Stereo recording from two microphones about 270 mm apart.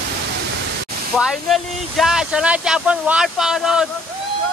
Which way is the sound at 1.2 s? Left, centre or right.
Centre.